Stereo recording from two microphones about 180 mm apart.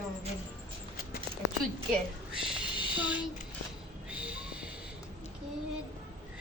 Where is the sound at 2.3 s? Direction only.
5° right (ahead or behind).